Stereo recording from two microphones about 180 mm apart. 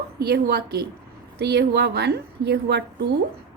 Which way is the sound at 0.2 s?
65° right (ahead or behind).